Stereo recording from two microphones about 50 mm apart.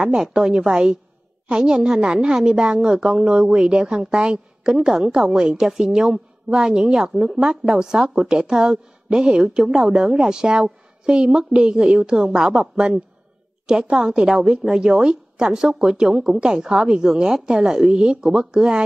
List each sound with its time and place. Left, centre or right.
0.1 s a woman's voice: centre